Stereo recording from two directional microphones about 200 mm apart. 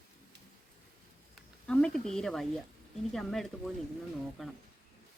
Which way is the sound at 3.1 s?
Centre (ahead or behind).